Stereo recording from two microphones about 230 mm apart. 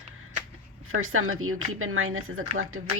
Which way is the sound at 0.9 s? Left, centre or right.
Right.